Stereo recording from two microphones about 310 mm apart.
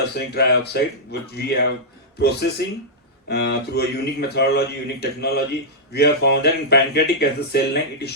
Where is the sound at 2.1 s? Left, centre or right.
Left.